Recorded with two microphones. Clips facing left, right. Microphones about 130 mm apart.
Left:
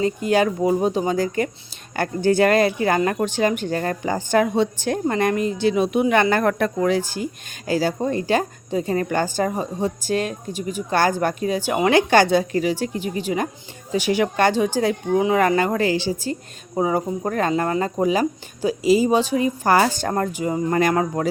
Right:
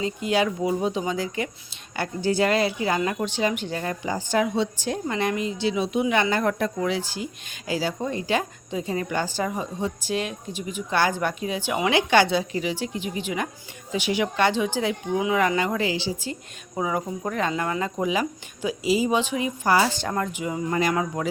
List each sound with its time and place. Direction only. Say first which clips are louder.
0.0 s speech: left 5 dB; 45° left (ahead or behind)